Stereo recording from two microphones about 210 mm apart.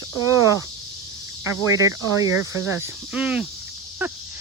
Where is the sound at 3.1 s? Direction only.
5° right (ahead or behind).